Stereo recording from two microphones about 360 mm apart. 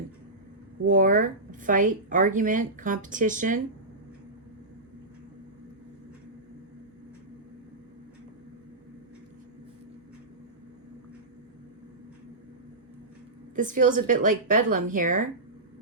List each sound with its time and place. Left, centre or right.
0.9 s a woman's voice: right
13.6 s a woman's voice: right